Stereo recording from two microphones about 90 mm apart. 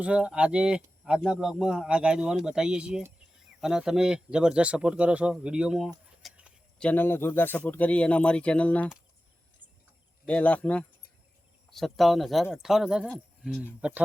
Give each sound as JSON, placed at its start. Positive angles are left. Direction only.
{"t": 0.0, "sound": "speech", "side_deg": -15}
{"t": 6.9, "sound": "speech", "side_deg": 25}
{"t": 10.2, "sound": "speech", "side_deg": 15}
{"t": 11.7, "sound": "speech", "side_deg": 0}
{"t": 13.1, "sound": "speech", "side_deg": 5}
{"t": 13.6, "sound": "speech", "side_deg": -15}